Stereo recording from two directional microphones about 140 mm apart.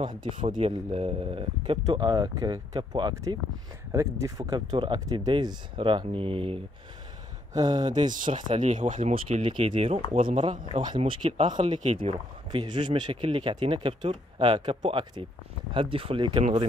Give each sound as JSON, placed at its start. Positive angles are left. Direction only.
{"t": 0.0, "sound": "speech", "side_deg": -35}
{"t": 0.6, "sound": "speech", "side_deg": -45}
{"t": 1.6, "sound": "speech", "side_deg": -30}
{"t": 3.9, "sound": "speech", "side_deg": -20}
{"t": 7.5, "sound": "speech", "side_deg": -30}
{"t": 7.8, "sound": "speech", "side_deg": -60}
{"t": 9.1, "sound": "speech", "side_deg": -40}
{"t": 11.0, "sound": "speech", "side_deg": -45}